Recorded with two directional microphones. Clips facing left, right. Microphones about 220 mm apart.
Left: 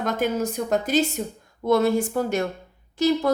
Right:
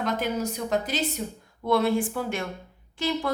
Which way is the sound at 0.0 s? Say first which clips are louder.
Left 3 dB; 45° left (ahead or behind).